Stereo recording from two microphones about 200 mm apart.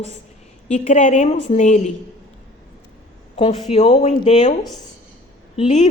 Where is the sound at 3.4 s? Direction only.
35° left (ahead or behind).